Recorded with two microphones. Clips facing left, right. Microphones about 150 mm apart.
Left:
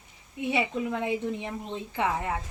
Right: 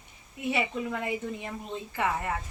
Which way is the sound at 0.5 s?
15° left (ahead or behind).